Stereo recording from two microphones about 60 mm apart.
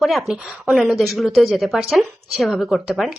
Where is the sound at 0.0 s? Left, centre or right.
Centre.